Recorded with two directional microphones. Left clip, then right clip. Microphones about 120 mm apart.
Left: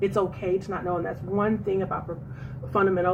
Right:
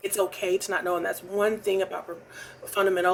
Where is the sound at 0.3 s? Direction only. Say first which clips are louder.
Right 1 dB; 35° right (ahead or behind).